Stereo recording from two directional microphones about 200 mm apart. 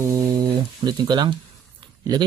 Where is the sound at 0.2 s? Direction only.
20° right (ahead or behind).